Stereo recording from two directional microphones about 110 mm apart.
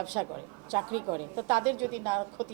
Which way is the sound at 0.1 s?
20° right (ahead or behind).